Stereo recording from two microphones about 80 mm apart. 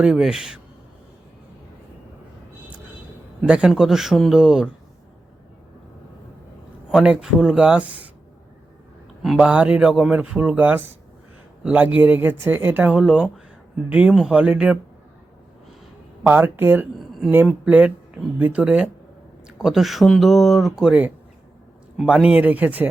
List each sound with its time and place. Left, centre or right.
0.0 s speech: centre
3.4 s speech: centre
6.9 s speech: centre
9.4 s speech: centre
13.3 s a sound: centre
14.1 s speech: centre
14.3 s speech: centre
16.2 s speech: right; by 20.9 s centre
21.9 s speech: centre